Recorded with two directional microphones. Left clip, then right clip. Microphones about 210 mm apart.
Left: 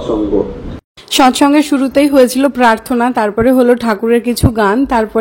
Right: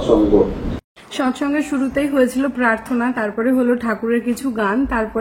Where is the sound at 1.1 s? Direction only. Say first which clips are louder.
Left 12 dB; 50° left (ahead or behind).